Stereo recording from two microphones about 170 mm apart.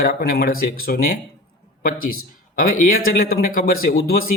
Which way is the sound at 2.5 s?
55° left (ahead or behind).